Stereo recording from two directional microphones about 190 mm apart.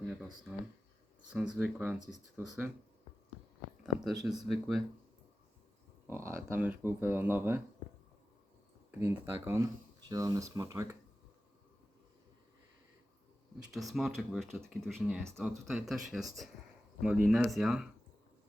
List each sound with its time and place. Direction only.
1.3 s speech: 5° right (ahead or behind)
3.8 s speech: centre (ahead or behind)
6.1 s speech: 15° right (ahead or behind)
8.9 s speech: 10° right (ahead or behind)
13.7 s speech: centre (ahead or behind)
15.0 s speech: 10° right (ahead or behind)